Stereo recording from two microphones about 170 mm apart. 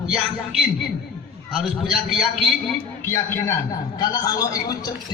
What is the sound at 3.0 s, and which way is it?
A man's voice, 15° left (ahead or behind).